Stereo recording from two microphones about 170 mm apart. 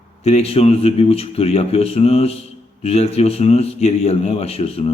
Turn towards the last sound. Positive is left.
turn(degrees=35)  # may be behind; listen again after turning